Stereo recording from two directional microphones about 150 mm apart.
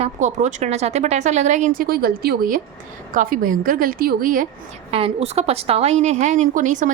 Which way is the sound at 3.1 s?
65° right (ahead or behind).